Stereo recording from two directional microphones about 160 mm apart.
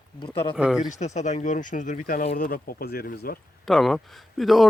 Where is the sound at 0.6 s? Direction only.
5° right (ahead or behind).